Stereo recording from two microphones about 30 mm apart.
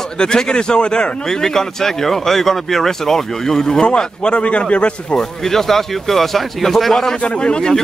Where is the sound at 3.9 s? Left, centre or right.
Left.